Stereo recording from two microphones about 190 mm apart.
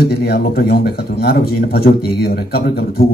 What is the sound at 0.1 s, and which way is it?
A man's voice, 60° left (ahead or behind).